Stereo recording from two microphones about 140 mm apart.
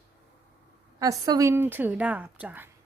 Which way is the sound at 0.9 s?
25° right (ahead or behind).